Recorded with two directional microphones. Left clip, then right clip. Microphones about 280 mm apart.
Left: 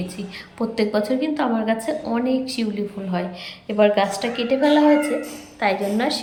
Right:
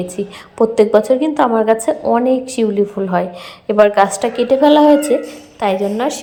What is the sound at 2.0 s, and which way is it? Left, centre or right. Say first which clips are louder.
Speech: right 11 dB; right.